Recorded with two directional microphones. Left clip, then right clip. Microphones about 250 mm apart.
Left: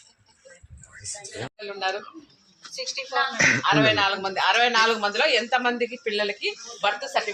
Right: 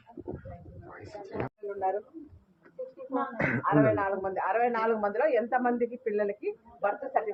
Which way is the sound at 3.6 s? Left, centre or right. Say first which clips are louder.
Left 5 dB; left.